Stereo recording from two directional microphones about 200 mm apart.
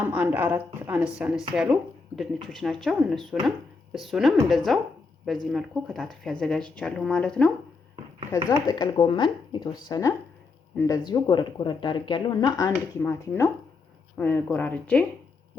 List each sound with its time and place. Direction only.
0.0 s speech: 10° right (ahead or behind)
8.4 s speech: 20° left (ahead or behind)